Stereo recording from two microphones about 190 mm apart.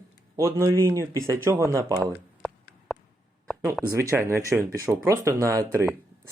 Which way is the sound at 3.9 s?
15° right (ahead or behind).